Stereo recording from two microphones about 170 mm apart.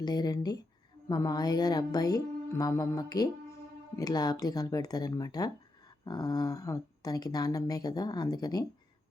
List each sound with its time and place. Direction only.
0.0 s a woman's voice: 25° left (ahead or behind)